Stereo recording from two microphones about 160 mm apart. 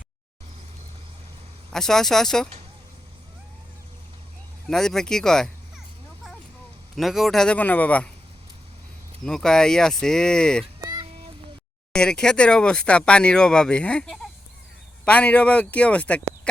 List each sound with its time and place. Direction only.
1.7 s speech: 5° left (ahead or behind)
4.6 s speech: 5° left (ahead or behind)
6.9 s a man's voice: centre (ahead or behind)
9.2 s speech: 5° left (ahead or behind)
10.8 s fowl: 25° right (ahead or behind)
11.9 s a man's voice: 5° left (ahead or behind)